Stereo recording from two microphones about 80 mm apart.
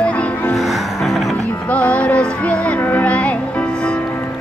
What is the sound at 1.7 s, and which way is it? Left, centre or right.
Music, centre.